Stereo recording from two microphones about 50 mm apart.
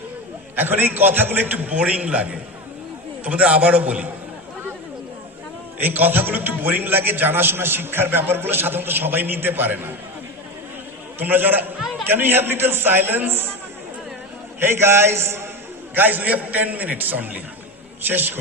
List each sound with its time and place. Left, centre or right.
0.5 s a man's voice: right
5.8 s a man's voice: right
11.2 s a man's voice: right
11.8 s a sound: centre
12.0 s a man's voice: right
14.6 s a man's voice: right
16.0 s a man's voice: right